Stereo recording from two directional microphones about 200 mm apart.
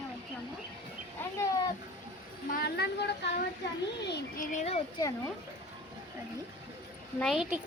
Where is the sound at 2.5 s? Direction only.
50° left (ahead or behind).